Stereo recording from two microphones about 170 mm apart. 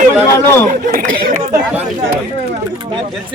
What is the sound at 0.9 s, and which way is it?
Speech, 60° right (ahead or behind).